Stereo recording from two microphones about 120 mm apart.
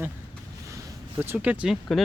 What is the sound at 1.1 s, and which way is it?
Speech, 15° right (ahead or behind).